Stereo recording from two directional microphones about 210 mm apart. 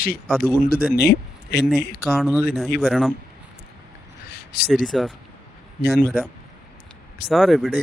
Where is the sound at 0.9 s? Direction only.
50° left (ahead or behind).